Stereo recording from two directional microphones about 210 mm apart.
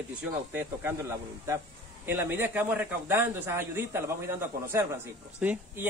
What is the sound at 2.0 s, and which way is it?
A man's voice, 10° right (ahead or behind).